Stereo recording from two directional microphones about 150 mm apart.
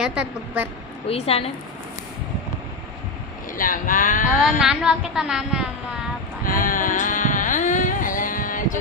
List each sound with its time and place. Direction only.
0.0 s speech: 5° right (ahead or behind)
1.0 s a woman's voice: 40° left (ahead or behind)
3.5 s speech: 65° left (ahead or behind)
4.4 s a woman's voice: centre (ahead or behind)
6.4 s carnatic music: 70° left (ahead or behind)